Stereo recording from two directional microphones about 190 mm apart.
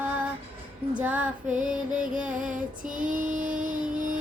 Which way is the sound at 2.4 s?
45° right (ahead or behind).